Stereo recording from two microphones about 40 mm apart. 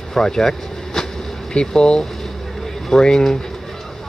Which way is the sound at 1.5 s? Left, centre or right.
Centre.